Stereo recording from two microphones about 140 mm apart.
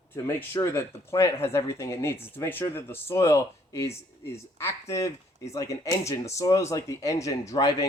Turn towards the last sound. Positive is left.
turn(degrees=25)  # may be behind; listen again after turning